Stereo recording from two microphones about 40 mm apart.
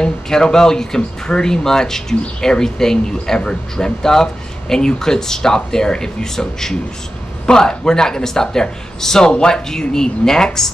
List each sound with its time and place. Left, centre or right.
0.0 s speech: centre